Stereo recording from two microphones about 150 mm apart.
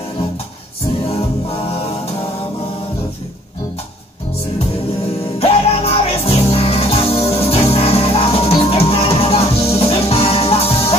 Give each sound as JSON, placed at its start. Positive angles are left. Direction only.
{"t": 1.1, "sound": "music", "side_deg": 40}
{"t": 5.4, "sound": "music", "side_deg": 40}